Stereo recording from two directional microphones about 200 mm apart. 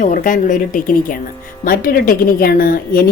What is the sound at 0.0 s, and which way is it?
A woman's voice, 40° left (ahead or behind).